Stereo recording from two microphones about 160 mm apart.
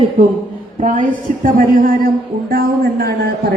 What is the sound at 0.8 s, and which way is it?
A woman's voice, 55° right (ahead or behind).